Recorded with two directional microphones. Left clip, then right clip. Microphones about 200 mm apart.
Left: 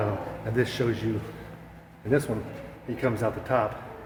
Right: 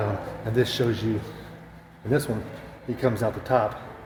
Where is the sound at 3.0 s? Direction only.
45° right (ahead or behind).